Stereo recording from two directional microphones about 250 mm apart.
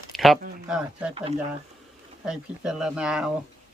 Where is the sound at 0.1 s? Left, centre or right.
Centre.